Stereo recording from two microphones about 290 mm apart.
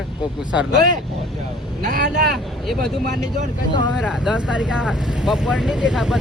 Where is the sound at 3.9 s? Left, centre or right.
Centre.